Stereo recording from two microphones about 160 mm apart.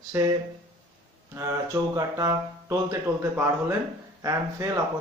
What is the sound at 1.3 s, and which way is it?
Speech, 20° right (ahead or behind).